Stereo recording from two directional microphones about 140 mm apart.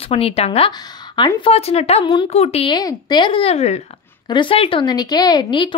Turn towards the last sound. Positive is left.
turn(degrees=35)  # may be behind; listen again after turning